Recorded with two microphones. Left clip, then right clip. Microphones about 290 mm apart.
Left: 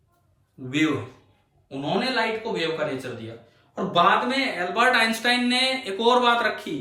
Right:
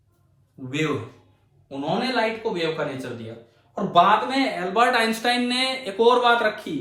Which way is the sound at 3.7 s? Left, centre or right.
Centre.